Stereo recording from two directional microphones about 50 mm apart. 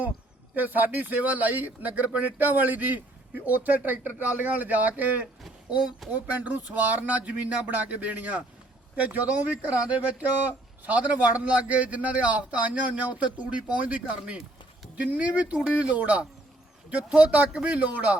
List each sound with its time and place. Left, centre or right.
0.5 s a man's voice: right